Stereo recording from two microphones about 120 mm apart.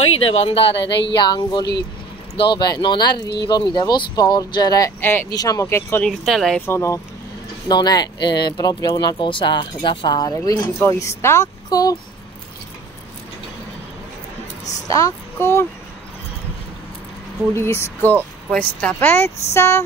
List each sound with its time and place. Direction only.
0.2 s speech: 55° left (ahead or behind); by 6.0 s 20° left (ahead or behind)
6.0 s speech: 5° left (ahead or behind)
6.6 s speech: 20° left (ahead or behind)
7.6 s speech: 35° left (ahead or behind)
14.6 s a sound: 80° left
14.9 s speech: 30° left (ahead or behind)
17.6 s speech: 20° left (ahead or behind)